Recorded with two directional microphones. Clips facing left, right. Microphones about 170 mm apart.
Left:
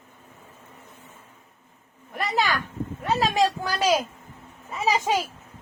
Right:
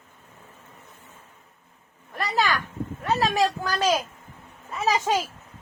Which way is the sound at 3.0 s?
20° left (ahead or behind).